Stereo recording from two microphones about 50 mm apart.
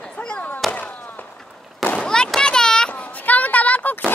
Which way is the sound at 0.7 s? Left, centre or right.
Left.